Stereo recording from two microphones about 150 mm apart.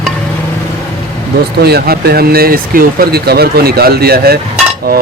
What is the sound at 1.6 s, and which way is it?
Speech, 90° right.